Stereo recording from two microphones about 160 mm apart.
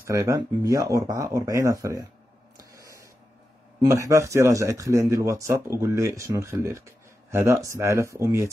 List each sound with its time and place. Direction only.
0.0 s speech: 20° right (ahead or behind)
2.7 s printer: 20° right (ahead or behind)
3.8 s speech: 20° right (ahead or behind)